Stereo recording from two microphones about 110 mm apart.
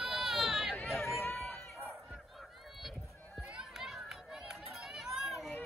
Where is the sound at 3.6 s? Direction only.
Centre (ahead or behind).